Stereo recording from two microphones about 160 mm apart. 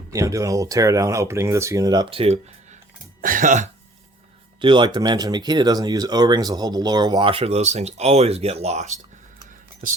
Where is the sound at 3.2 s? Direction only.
60° right (ahead or behind).